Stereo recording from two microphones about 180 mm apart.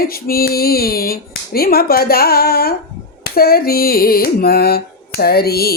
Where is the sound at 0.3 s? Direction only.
55° left (ahead or behind).